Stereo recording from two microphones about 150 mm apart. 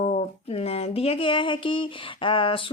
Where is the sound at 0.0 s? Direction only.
45° left (ahead or behind).